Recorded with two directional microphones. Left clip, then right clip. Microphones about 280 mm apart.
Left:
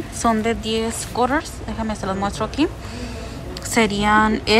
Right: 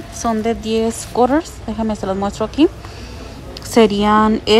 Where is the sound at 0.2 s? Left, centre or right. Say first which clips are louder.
Right 1 dB; centre.